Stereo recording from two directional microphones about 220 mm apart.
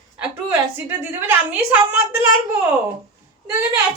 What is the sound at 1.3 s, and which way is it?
Speech, 10° right (ahead or behind).